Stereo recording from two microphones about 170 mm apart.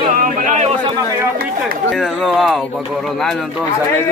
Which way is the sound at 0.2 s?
50° right (ahead or behind).